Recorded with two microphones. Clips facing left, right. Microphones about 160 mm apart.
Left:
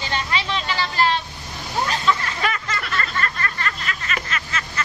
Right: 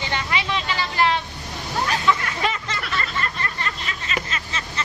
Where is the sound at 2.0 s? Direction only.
25° right (ahead or behind).